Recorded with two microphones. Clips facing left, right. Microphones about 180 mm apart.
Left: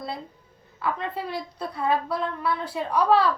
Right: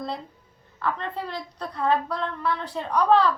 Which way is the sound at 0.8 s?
10° left (ahead or behind).